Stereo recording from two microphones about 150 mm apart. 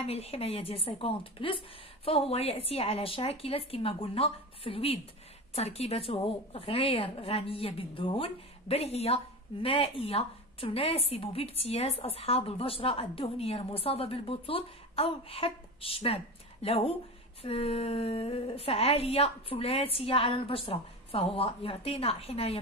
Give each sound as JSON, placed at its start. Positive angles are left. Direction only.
{"t": 0.0, "sound": "a woman's voice", "side_deg": 40}